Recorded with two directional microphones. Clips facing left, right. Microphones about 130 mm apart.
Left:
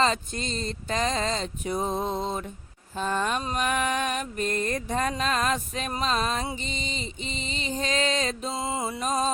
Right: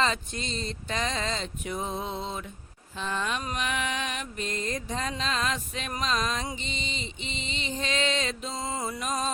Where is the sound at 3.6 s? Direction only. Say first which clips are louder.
Left 7 dB; 45° left (ahead or behind).